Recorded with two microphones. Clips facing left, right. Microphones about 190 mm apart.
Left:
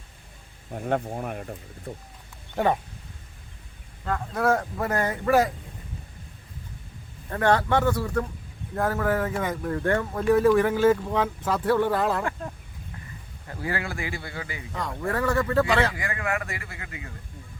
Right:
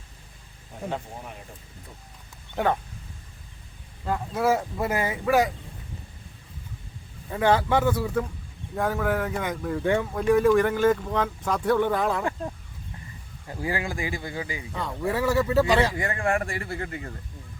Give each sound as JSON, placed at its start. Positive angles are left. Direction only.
{"t": 0.9, "sound": "speech", "side_deg": 60}
{"t": 4.0, "sound": "speech", "side_deg": -10}
{"t": 7.3, "sound": "speech", "side_deg": -5}
{"t": 13.5, "sound": "speech", "side_deg": -15}
{"t": 14.7, "sound": "speech", "side_deg": -5}
{"t": 16.0, "sound": "speech", "side_deg": -25}